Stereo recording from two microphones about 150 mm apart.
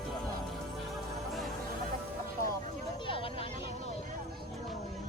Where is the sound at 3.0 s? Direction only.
35° left (ahead or behind).